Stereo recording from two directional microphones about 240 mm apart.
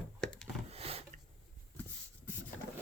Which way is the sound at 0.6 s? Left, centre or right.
Right.